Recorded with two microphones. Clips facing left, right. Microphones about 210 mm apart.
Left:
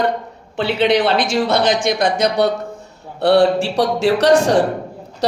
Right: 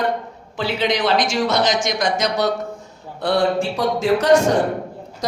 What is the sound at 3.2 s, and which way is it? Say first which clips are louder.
A woman's voice: left 5 dB; 70° left (ahead or behind).